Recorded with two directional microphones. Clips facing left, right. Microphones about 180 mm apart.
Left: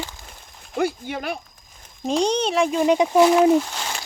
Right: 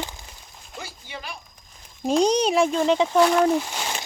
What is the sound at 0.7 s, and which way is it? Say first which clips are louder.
Speech: left 14 dB; 60° left (ahead or behind).